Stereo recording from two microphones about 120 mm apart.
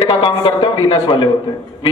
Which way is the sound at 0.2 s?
45° left (ahead or behind).